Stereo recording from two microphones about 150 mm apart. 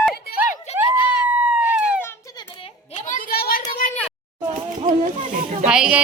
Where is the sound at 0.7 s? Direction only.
45° left (ahead or behind).